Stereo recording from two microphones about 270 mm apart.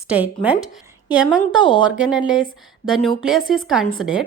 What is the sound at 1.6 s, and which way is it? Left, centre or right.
Speech, centre.